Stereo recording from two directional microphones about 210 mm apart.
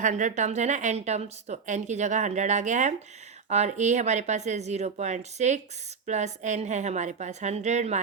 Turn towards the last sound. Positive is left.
turn(degrees=-35)  # may be behind; listen again after turning